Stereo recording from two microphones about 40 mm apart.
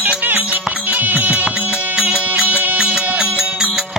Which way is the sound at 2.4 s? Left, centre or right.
Right.